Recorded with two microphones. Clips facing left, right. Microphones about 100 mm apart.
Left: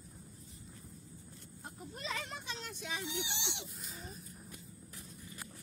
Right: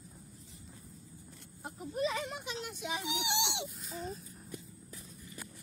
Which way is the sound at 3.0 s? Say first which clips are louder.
Right 6 dB; 75° right (ahead or behind).